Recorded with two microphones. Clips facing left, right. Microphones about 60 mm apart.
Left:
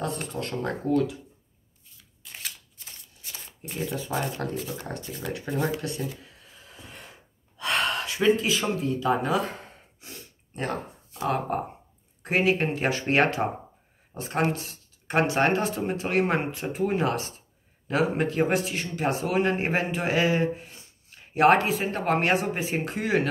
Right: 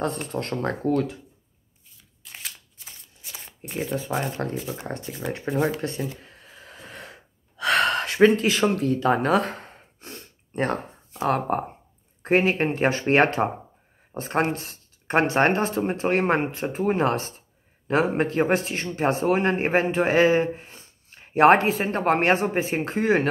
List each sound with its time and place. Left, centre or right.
0.0 s speech: right
2.2 s scissors: centre
3.3 s shuffling cards: centre
3.7 s speech: right
5.2 s speech: right
5.6 s speech: right
6.2 s gasp: right
11.2 s speech: right
12.2 s speech: right